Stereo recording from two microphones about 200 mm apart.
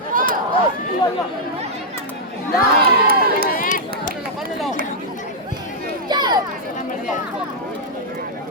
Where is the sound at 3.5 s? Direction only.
40° left (ahead or behind).